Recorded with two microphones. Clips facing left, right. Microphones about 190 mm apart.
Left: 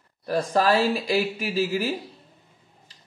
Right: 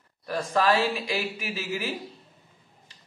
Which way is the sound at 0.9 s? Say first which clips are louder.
Left 6 dB; 35° left (ahead or behind).